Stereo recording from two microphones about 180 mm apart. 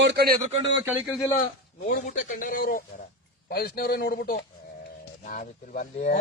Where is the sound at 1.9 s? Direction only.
45° left (ahead or behind).